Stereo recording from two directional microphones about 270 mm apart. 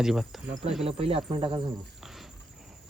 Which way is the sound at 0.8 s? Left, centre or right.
Right.